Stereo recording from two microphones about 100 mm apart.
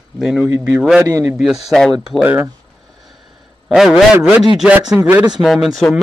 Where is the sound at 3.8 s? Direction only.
5° right (ahead or behind).